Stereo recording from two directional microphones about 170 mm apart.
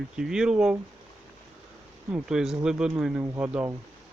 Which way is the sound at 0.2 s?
5° right (ahead or behind).